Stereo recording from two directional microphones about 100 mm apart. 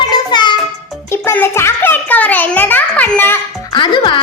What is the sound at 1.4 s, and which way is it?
A child's voice, 25° left (ahead or behind).